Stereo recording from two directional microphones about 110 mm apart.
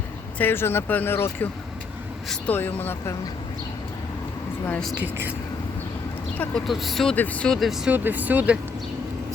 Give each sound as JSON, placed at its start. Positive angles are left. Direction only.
{"t": 0.3, "sound": "speech", "side_deg": 20}
{"t": 2.5, "sound": "speech", "side_deg": 15}
{"t": 4.9, "sound": "speech", "side_deg": -20}
{"t": 6.7, "sound": "speech", "side_deg": 0}
{"t": 7.9, "sound": "speech", "side_deg": -15}